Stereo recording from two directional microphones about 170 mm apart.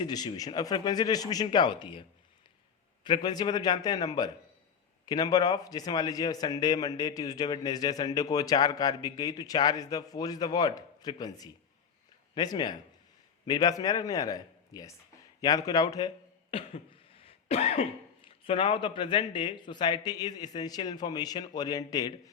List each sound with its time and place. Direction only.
0.0 s a man's voice: 25° left (ahead or behind)